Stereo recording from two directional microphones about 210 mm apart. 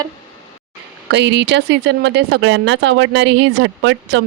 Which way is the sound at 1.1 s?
55° right (ahead or behind).